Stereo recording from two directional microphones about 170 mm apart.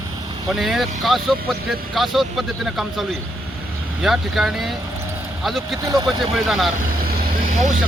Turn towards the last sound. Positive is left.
turn(degrees=-50)  # may be behind; listen again after turning